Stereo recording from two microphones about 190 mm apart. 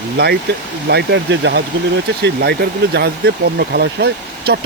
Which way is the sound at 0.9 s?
65° right (ahead or behind).